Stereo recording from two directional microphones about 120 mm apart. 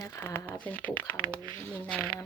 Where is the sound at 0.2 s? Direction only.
20° left (ahead or behind).